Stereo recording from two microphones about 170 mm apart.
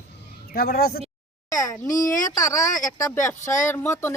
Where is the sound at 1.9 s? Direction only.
50° left (ahead or behind).